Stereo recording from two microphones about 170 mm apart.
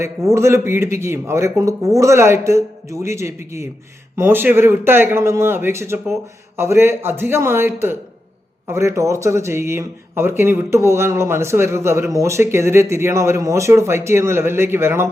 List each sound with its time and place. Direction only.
0.0 s a man's voice: 15° right (ahead or behind)